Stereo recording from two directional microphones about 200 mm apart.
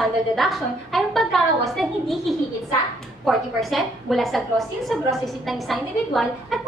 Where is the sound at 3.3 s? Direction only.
Centre (ahead or behind).